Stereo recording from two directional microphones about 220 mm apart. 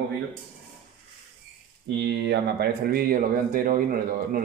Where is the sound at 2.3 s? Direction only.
45° right (ahead or behind).